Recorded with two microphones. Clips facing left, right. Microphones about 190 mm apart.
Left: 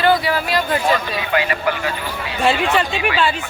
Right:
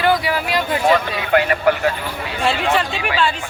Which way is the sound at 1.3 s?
55° right (ahead or behind).